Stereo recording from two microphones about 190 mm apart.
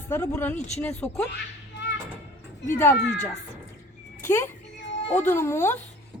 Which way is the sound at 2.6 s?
15° left (ahead or behind).